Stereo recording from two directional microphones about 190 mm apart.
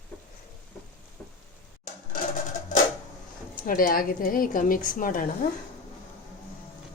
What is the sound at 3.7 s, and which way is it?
A woman's voice, 50° left (ahead or behind).